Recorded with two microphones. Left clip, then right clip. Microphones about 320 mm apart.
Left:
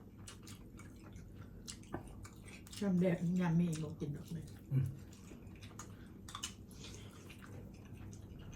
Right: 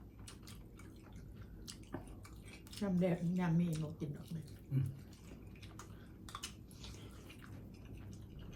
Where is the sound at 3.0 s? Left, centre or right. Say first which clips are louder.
Even; centre.